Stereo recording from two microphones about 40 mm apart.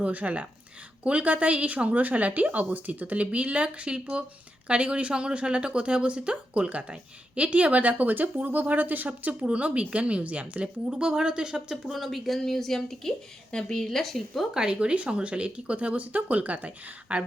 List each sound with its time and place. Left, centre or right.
0.0 s speech: right
10.8 s speech: centre
11.9 s speech: centre
14.5 s speech: centre
14.8 s speech: right